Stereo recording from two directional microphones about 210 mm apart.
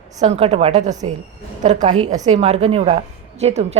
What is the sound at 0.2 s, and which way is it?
A woman's voice, 30° right (ahead or behind).